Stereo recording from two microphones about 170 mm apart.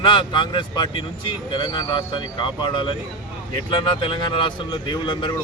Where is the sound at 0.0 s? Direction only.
30° left (ahead or behind).